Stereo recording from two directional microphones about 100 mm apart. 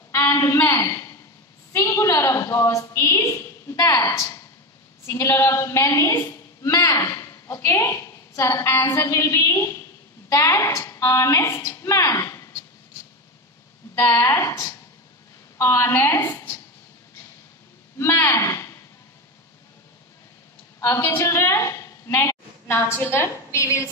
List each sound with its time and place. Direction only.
0.1 s a sound: 30° left (ahead or behind)
1.7 s a woman's voice: 30° left (ahead or behind)
13.9 s a woman's voice: 30° left (ahead or behind)
16.2 s a woman's voice: 45° left (ahead or behind)
17.9 s speech: 25° left (ahead or behind)
20.8 s a woman's voice: 25° left (ahead or behind)